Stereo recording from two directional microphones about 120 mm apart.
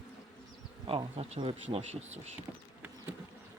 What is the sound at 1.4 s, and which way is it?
Speech, 50° right (ahead or behind).